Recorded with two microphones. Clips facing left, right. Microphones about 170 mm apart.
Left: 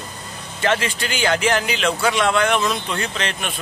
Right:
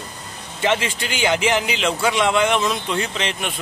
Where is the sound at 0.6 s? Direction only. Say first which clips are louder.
Even; 15° right (ahead or behind).